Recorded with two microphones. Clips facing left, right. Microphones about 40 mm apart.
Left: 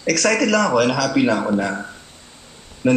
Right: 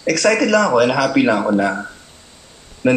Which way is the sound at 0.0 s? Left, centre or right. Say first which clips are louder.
Right 2 dB; centre.